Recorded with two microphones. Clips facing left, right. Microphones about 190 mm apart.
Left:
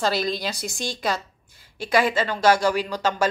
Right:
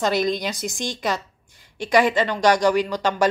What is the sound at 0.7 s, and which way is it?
A woman's voice, 20° right (ahead or behind).